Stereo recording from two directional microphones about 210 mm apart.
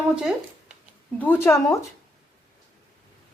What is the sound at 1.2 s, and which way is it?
Speech, 10° left (ahead or behind).